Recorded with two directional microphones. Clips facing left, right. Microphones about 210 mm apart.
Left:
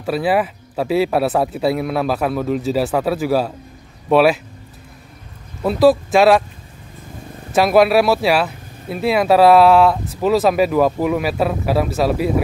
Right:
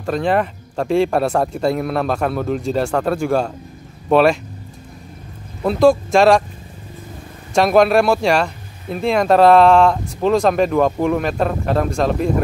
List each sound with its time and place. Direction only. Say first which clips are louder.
0.0 s speech: even; 5° left (ahead or behind)
5.6 s speech: even; 5° left (ahead or behind)
7.5 s speech: even; 5° left (ahead or behind)